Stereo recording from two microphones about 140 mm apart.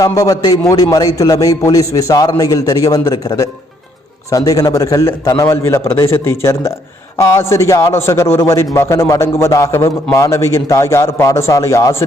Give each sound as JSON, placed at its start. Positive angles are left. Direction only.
{"t": 0.0, "sound": "a man's voice", "side_deg": 25}